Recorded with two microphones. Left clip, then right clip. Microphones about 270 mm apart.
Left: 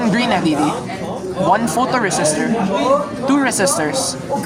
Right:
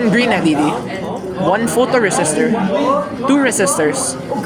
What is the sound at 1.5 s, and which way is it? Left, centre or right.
A man's voice, centre.